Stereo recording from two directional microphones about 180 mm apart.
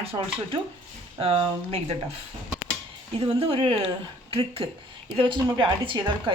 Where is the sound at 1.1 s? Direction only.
30° right (ahead or behind).